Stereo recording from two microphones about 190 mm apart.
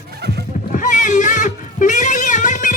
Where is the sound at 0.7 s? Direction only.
40° left (ahead or behind).